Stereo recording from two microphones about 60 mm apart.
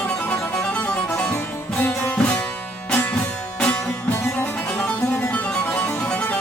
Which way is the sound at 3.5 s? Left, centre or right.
Left.